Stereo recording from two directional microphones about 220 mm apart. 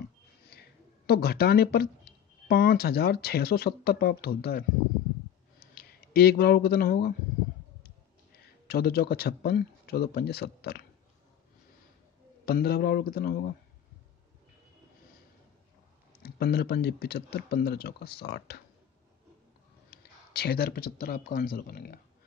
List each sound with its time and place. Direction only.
0.5 s a sound: 45° left (ahead or behind)
2.4 s speech: 45° left (ahead or behind)
5.8 s speech: 45° left (ahead or behind)
8.6 s speech: 45° left (ahead or behind)
12.4 s speech: 45° left (ahead or behind)
16.2 s speech: 45° left (ahead or behind)
19.9 s speech: 45° left (ahead or behind)